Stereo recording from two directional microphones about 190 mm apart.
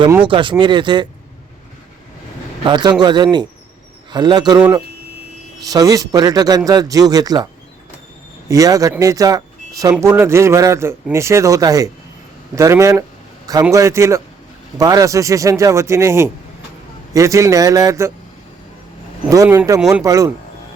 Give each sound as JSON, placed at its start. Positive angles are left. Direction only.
{"t": 0.3, "sound": "a man's voice", "side_deg": -25}
{"t": 2.6, "sound": "a man's voice", "side_deg": -25}
{"t": 8.4, "sound": "a man's voice", "side_deg": -20}
{"t": 19.3, "sound": "a man's voice", "side_deg": -15}